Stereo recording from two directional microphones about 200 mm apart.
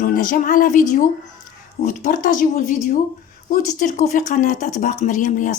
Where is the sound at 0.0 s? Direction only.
45° left (ahead or behind).